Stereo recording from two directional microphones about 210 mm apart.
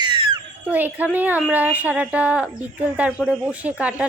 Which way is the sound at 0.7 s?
10° right (ahead or behind).